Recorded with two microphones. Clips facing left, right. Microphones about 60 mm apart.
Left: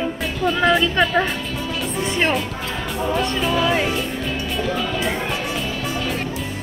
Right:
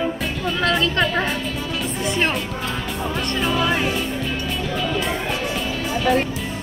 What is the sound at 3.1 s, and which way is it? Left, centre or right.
Speech, centre.